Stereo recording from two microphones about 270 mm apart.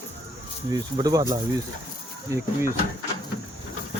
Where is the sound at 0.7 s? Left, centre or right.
Centre.